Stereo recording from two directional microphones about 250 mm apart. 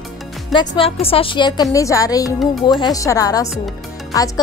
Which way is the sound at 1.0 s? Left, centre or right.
Left.